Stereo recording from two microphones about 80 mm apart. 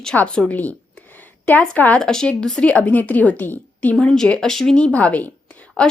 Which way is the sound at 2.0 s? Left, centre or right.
Centre.